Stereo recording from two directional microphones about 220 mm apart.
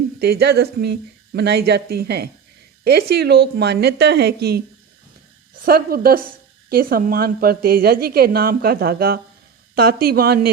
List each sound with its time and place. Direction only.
0.2 s a woman's voice: 45° right (ahead or behind)
5.6 s a woman's voice: 45° right (ahead or behind)